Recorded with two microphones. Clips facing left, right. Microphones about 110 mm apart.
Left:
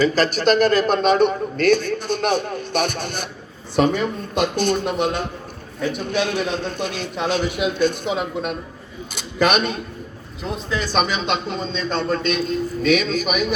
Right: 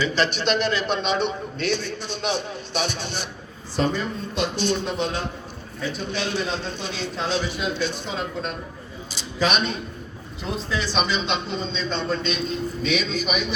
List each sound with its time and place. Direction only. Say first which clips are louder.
0.0 s a man's voice: left 5 dB; 40° left (ahead or behind)
3.8 s a man's voice: left 6 dB; 65° left (ahead or behind); by 13.5 s 50° left (ahead or behind)